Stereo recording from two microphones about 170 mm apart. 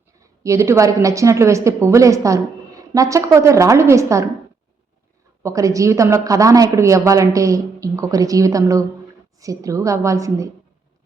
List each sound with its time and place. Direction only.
0.4 s a woman's voice: 15° right (ahead or behind)
5.4 s speech: 20° right (ahead or behind)